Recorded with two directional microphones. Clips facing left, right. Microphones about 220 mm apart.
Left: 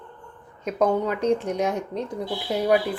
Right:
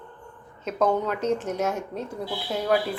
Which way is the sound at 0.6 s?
15° left (ahead or behind).